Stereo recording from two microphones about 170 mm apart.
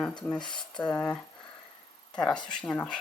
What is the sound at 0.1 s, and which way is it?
Speech, 25° left (ahead or behind).